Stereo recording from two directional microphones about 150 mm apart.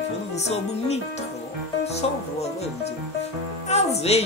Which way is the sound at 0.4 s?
45° left (ahead or behind).